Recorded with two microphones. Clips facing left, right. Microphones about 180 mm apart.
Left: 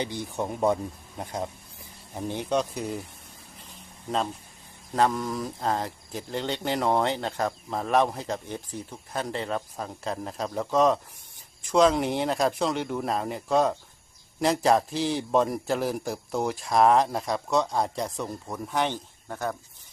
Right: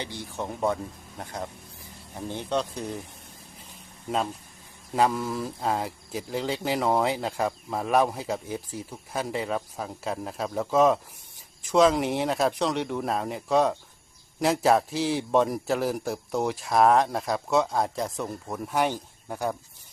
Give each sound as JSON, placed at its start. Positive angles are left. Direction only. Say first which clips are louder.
{"t": 0.0, "sound": "speech", "louder": "left 4 dB", "side_deg": 15}
{"t": 4.9, "sound": "speech", "louder": "even", "side_deg": -5}